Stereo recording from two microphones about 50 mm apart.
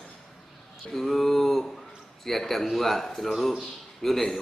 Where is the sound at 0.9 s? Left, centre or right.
Centre.